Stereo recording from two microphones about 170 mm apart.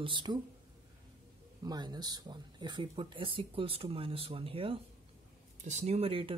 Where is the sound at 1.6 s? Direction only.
25° right (ahead or behind).